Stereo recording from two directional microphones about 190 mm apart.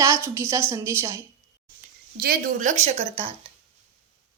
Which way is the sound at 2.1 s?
50° right (ahead or behind).